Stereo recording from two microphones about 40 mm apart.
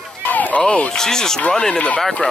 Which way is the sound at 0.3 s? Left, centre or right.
Left.